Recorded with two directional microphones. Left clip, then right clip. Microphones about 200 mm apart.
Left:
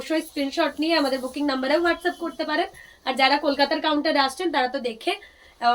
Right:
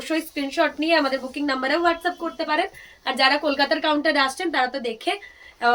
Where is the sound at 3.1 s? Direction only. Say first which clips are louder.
Even; 20° right (ahead or behind).